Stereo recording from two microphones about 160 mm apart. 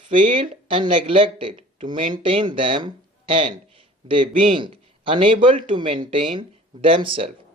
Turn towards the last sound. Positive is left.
turn(degrees=-35)  # may be behind; listen again after turning